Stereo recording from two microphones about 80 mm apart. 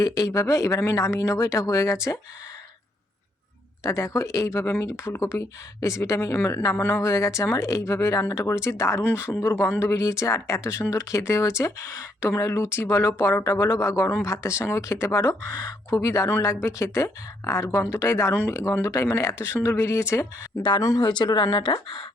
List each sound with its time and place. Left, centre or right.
0.2 s speech: left
3.8 s speech: left
6.3 s a woman's voice: left
7.0 s speech: left
20.6 s speech: left